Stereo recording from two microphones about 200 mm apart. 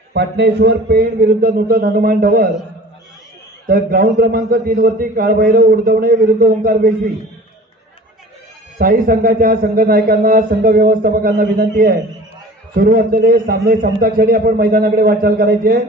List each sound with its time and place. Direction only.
0.1 s a man's voice: 55° right (ahead or behind)
3.6 s a man's voice: 45° right (ahead or behind)
8.7 s a man's voice: 45° right (ahead or behind)